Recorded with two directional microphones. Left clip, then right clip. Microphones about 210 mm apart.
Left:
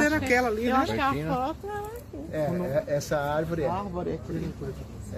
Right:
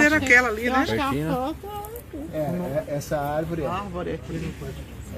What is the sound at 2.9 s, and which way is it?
Speech, 5° left (ahead or behind).